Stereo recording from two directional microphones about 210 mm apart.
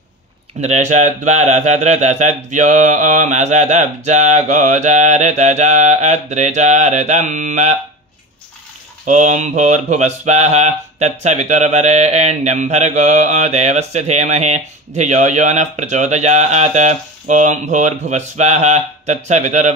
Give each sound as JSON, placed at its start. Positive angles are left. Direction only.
{"t": 0.6, "sound": "mantra", "side_deg": -35}
{"t": 9.0, "sound": "mantra", "side_deg": -35}